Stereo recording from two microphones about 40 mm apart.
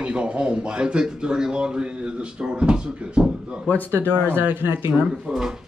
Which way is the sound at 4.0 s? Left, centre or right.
Right.